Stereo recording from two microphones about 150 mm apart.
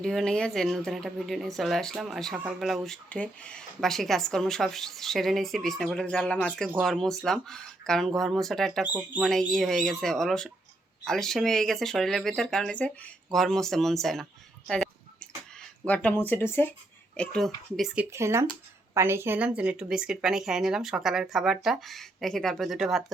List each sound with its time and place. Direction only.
0.0 s speech: 5° left (ahead or behind)
8.8 s speech: 10° right (ahead or behind)
9.5 s speech: centre (ahead or behind)
14.7 s a sound: 5° left (ahead or behind)
15.9 s speech: 10° left (ahead or behind)
17.2 s speech: centre (ahead or behind)
18.0 s speech: 20° right (ahead or behind); by 23.1 s centre (ahead or behind)